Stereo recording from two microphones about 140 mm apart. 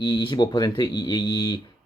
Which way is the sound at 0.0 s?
35° left (ahead or behind).